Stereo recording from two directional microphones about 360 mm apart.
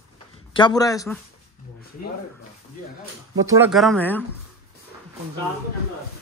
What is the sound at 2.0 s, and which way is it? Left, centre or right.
Speech, left.